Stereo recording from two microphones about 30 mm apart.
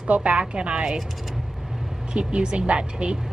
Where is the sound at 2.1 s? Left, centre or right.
Right.